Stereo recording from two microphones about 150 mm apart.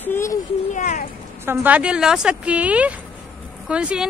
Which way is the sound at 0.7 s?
55° left (ahead or behind).